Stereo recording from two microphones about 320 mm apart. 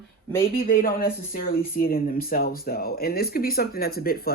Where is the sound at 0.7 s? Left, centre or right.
Left.